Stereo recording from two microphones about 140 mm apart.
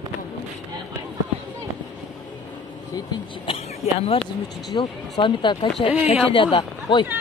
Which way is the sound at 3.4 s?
45° left (ahead or behind).